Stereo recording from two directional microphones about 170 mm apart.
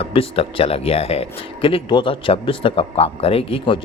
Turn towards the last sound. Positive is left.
turn(degrees=30)  # may be behind; listen again after turning